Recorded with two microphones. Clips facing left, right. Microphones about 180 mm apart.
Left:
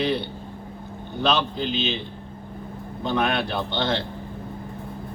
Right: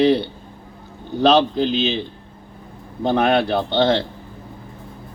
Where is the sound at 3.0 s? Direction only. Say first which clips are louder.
Right 7 dB; 60° right (ahead or behind).